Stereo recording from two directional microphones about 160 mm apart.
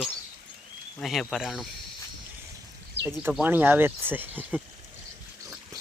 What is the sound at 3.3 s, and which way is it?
Speech, 10° right (ahead or behind).